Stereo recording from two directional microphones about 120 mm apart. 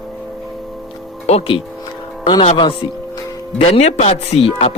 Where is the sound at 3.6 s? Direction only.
60° left (ahead or behind).